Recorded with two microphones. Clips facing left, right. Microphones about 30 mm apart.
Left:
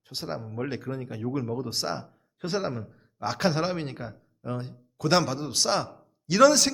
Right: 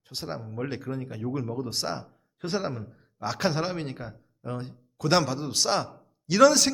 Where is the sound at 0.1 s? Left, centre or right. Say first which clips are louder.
Left 1 dB; centre.